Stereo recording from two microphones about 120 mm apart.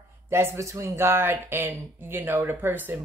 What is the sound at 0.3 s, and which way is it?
A woman's voice, 25° right (ahead or behind).